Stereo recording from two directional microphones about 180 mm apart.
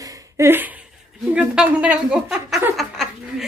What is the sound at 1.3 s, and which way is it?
Speech, 5° right (ahead or behind).